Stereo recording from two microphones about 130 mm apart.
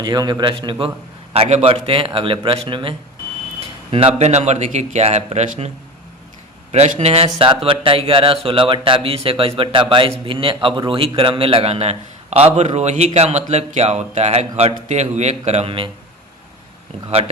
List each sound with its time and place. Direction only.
0.0 s a man's voice: 30° right (ahead or behind)
1.3 s speech: 55° right (ahead or behind)
3.9 s speech: 55° right (ahead or behind)